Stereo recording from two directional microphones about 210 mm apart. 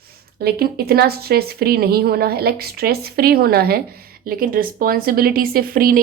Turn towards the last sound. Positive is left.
turn(degrees=-45)  # may be behind; listen again after turning